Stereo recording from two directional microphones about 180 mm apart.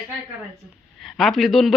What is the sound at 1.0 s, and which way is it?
Speech, centre (ahead or behind).